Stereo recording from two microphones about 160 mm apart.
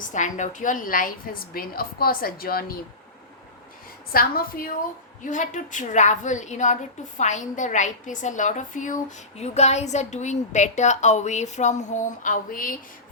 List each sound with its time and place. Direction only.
0.0 s a woman's voice: 50° left (ahead or behind); by 2.7 s 65° left (ahead or behind)
4.1 s a woman's voice: 65° left (ahead or behind)